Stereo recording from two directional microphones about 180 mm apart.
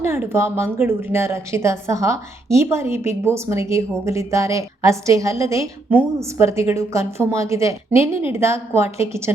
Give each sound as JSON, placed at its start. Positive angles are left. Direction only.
{"t": 0.0, "sound": "a woman's voice", "side_deg": -15}